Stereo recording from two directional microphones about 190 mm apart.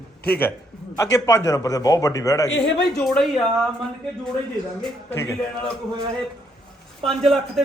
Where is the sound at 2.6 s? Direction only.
70° left (ahead or behind).